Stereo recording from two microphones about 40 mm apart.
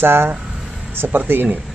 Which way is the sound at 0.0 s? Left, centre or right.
Right.